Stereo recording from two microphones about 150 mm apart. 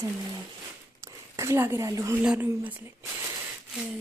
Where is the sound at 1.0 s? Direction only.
20° right (ahead or behind).